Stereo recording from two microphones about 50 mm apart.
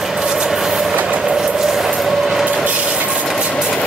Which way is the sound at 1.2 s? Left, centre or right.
Centre.